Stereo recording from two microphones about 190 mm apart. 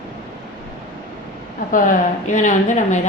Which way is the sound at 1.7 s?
45° left (ahead or behind).